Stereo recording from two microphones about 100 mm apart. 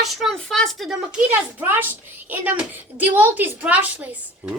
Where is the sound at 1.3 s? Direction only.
20° right (ahead or behind).